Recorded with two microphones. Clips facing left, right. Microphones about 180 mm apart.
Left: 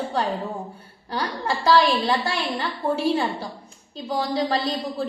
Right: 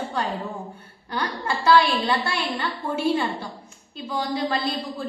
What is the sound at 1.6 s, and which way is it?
A woman's voice, 35° left (ahead or behind).